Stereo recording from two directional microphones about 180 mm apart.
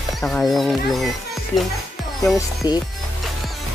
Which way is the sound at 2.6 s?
20° left (ahead or behind).